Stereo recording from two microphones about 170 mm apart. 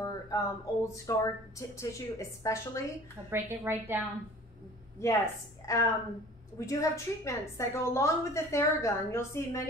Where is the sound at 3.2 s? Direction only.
15° right (ahead or behind).